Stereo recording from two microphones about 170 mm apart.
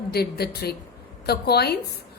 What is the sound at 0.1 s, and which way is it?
A woman's voice, 70° left (ahead or behind).